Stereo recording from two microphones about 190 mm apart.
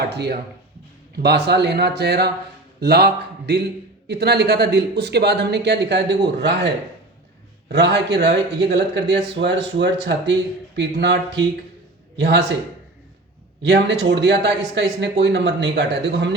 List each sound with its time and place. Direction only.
0.1 s a man's voice: 60° right (ahead or behind)
7.7 s a man's voice: 65° right (ahead or behind)
13.6 s a man's voice: 65° right (ahead or behind)